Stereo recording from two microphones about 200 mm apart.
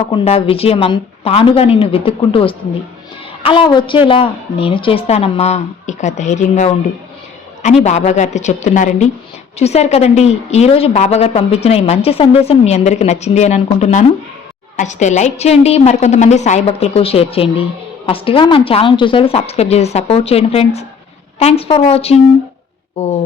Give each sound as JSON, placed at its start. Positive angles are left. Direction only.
{"t": 0.1, "sound": "a woman's voice", "side_deg": 30}